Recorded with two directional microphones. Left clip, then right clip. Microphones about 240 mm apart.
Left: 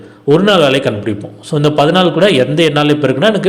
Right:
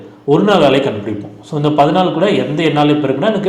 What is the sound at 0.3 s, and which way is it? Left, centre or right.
A man's voice, left.